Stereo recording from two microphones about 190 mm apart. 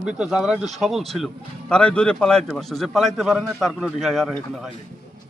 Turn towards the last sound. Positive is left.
turn(degrees=0)  # may be behind; listen again after turning